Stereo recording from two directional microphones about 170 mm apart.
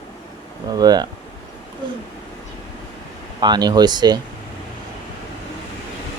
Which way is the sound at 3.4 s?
25° right (ahead or behind).